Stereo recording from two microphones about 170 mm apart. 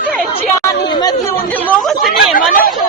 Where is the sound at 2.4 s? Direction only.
55° left (ahead or behind).